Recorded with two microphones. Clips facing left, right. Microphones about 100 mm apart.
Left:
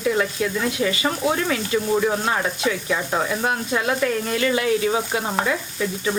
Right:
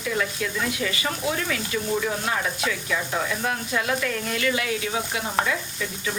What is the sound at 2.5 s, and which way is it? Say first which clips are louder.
Sizzle: left 4 dB; 25° left (ahead or behind).